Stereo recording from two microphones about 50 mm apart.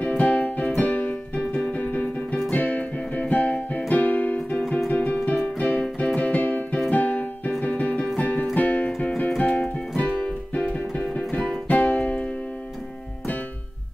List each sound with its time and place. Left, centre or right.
0.0 s keyboard: left
2.5 s music: left
6.9 s keyboard: left
7.6 s music: left